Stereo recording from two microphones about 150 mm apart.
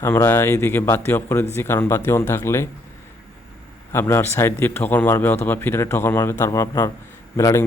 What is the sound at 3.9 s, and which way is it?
A man's voice, 15° left (ahead or behind).